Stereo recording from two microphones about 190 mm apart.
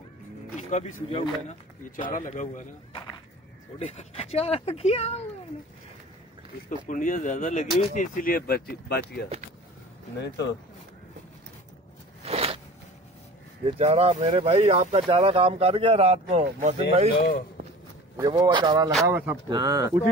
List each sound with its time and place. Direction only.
0.6 s speech: 40° left (ahead or behind)
2.9 s a sound: 25° left (ahead or behind)
3.8 s speech: 35° left (ahead or behind)
6.7 s speech: 45° left (ahead or behind); by 10.5 s 65° left (ahead or behind)
12.3 s a sound: 30° right (ahead or behind)
13.7 s speech: 35° right (ahead or behind)
18.1 s speech: 20° right (ahead or behind)
19.0 s speech: 10° right (ahead or behind)